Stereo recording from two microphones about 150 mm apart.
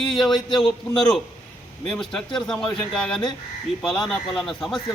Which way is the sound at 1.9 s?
5° left (ahead or behind).